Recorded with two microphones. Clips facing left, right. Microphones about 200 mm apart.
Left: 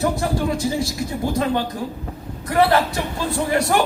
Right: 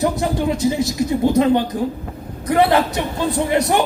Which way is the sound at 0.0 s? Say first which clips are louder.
Right 2 dB; 20° right (ahead or behind).